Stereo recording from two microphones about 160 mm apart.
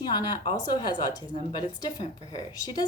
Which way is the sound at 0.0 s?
25° left (ahead or behind).